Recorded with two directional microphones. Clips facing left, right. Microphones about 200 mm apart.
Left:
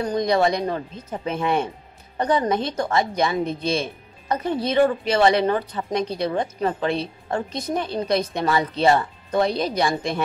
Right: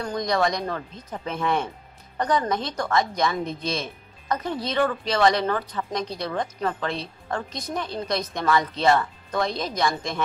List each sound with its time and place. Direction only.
0.0 s a woman's voice: 25° left (ahead or behind)
9.5 s speech: 10° left (ahead or behind)